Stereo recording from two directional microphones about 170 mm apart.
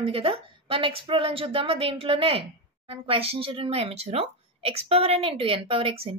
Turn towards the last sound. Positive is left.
turn(degrees=-35)  # may be behind; listen again after turning